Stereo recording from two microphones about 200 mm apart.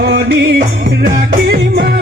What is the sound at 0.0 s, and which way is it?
Music, 55° right (ahead or behind).